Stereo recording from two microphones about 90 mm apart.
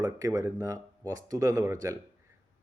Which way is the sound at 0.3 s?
40° right (ahead or behind).